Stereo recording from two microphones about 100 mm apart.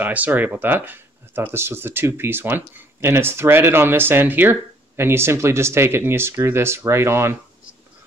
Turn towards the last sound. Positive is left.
turn(degrees=-25)  # may be behind; listen again after turning